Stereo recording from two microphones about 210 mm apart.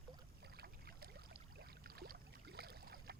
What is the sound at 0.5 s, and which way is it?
Boat, 50° right (ahead or behind).